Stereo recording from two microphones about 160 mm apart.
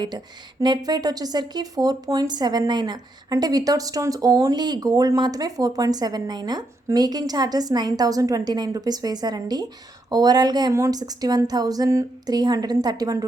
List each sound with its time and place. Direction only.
0.6 s speech: 25° right (ahead or behind)